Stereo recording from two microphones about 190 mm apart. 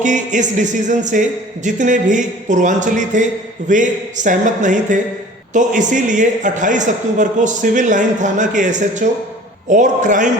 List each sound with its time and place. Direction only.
0.0 s a man's voice: 40° right (ahead or behind)